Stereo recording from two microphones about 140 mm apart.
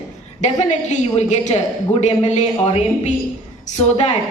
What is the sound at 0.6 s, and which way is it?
A woman's voice, 50° left (ahead or behind).